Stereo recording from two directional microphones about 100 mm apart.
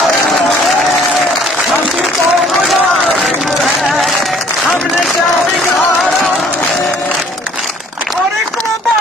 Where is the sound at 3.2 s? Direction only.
Centre (ahead or behind).